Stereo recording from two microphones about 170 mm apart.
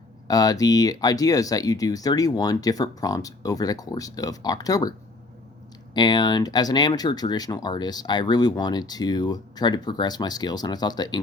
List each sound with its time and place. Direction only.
0.3 s speech: 20° left (ahead or behind)